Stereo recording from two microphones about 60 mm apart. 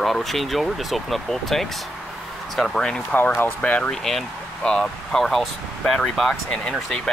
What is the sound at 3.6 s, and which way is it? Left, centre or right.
Speech, left.